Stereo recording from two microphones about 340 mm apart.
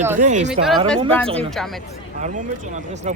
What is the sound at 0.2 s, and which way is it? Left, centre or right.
Speech, right.